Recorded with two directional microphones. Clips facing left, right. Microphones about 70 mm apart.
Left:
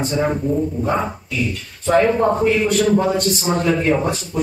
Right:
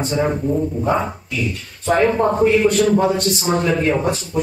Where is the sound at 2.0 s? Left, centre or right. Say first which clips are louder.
Left 1 dB; centre.